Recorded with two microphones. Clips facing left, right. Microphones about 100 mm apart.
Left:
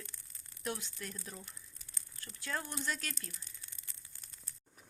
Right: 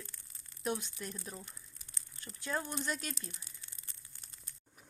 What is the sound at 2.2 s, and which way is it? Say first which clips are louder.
Speech: right 3 dB; 20° right (ahead or behind).